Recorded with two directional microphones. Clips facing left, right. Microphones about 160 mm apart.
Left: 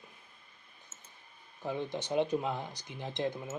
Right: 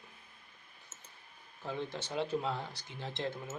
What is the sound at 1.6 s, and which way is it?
Speech, 15° left (ahead or behind).